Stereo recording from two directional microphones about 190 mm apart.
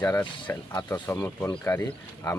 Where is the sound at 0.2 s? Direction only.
5° left (ahead or behind).